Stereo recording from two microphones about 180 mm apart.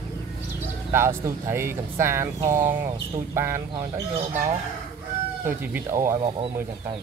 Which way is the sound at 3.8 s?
30° right (ahead or behind).